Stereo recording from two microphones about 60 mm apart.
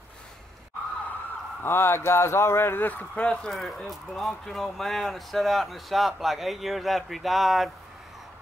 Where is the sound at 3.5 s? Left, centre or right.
Centre.